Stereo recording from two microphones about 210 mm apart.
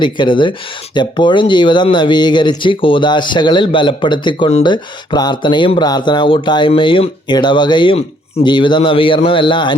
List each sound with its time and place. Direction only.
0.0 s speech: 25° left (ahead or behind)